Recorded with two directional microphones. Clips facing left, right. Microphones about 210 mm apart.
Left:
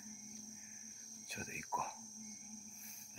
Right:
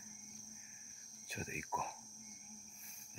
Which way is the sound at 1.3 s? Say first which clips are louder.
Right 2 dB; 5° right (ahead or behind).